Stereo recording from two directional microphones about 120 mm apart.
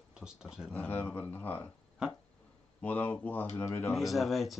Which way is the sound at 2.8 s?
15° left (ahead or behind).